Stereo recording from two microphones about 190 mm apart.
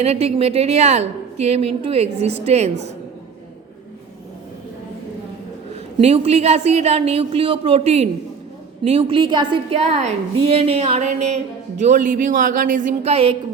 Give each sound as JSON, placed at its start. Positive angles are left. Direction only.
{"t": 0.0, "sound": "a woman's voice", "side_deg": -35}
{"t": 6.0, "sound": "a woman's voice", "side_deg": -35}